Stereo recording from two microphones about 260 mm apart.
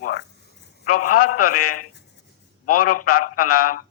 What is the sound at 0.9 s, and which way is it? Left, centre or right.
Mantra, left.